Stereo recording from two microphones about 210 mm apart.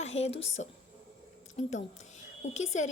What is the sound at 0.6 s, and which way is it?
A woman's voice, 35° left (ahead or behind).